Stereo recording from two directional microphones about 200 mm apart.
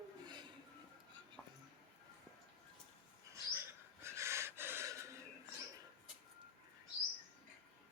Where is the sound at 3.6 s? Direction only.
15° right (ahead or behind).